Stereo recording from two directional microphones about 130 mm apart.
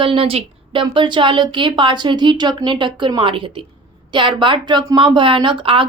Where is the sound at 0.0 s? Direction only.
45° right (ahead or behind).